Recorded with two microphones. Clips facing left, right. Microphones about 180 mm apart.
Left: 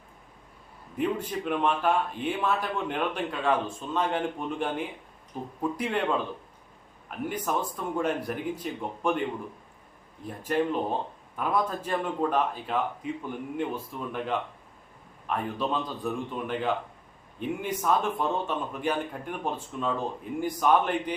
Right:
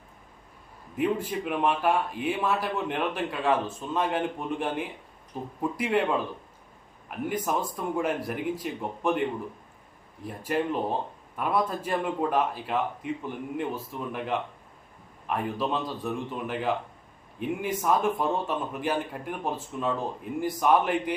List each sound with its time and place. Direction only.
0.9 s a man's voice: 5° right (ahead or behind)
7.3 s a man's voice: 10° right (ahead or behind)
10.2 s a man's voice: 5° right (ahead or behind)